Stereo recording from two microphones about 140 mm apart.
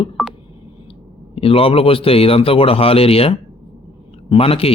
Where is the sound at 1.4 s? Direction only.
40° left (ahead or behind).